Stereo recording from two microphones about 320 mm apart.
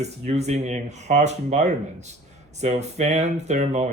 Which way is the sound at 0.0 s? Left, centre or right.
Centre.